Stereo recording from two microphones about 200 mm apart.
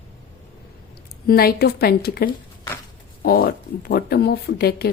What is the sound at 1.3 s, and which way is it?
Speech, 50° left (ahead or behind).